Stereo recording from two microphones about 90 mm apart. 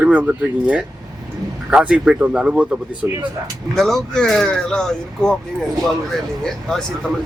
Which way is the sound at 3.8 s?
5° left (ahead or behind).